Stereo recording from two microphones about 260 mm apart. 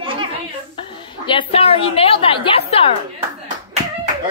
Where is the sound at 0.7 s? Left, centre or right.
Centre.